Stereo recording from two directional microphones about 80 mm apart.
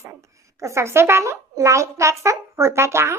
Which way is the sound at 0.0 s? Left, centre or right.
Right.